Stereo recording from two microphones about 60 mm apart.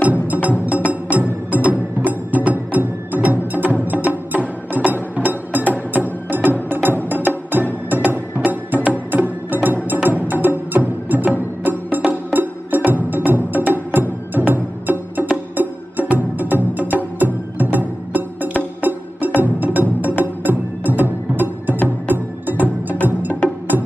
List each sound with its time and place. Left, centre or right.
0.0 s music: right
23.4 s music: centre